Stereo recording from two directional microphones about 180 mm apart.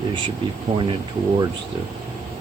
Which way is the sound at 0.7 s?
30° right (ahead or behind).